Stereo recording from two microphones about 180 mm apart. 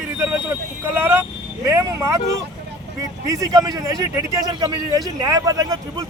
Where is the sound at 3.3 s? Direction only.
20° right (ahead or behind).